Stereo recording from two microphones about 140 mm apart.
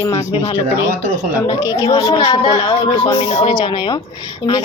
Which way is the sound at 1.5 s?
30° left (ahead or behind).